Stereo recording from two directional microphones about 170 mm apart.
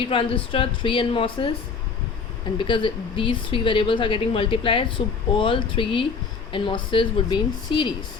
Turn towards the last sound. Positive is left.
turn(degrees=30)  # may be behind; listen again after turning